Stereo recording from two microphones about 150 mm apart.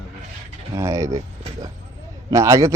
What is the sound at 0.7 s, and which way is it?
Mechanisms, 20° right (ahead or behind).